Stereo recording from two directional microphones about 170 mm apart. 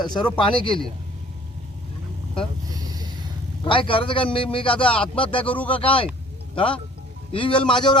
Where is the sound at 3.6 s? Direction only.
30° left (ahead or behind).